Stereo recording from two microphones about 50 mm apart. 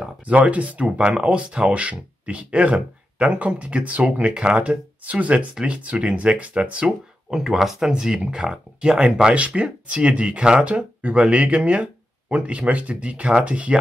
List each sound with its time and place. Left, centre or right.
0.2 s speech: right
7.3 s speech: centre; by 13.7 s right